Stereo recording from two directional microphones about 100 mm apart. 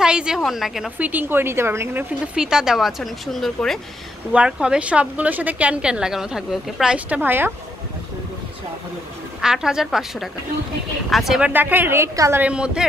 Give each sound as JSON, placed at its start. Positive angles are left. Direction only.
{"t": 0.0, "sound": "a woman's voice", "side_deg": -10}
{"t": 0.9, "sound": "a woman's voice", "side_deg": -15}
{"t": 2.3, "sound": "a woman's voice", "side_deg": -5}
{"t": 4.3, "sound": "a woman's voice", "side_deg": -10}
{"t": 7.2, "sound": "a woman's voice", "side_deg": -20}
{"t": 9.4, "sound": "a woman's voice", "side_deg": -5}
{"t": 11.5, "sound": "a woman's voice", "side_deg": -20}
{"t": 12.4, "sound": "a woman's voice", "side_deg": -10}